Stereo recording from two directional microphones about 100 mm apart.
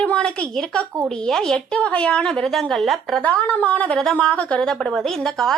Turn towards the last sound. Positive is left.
turn(degrees=5)  # may be behind; listen again after turning